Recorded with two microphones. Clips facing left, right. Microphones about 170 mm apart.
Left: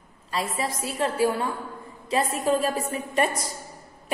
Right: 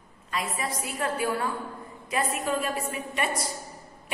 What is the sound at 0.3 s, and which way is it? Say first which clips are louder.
A woman's voice: left 3 dB; 30° left (ahead or behind).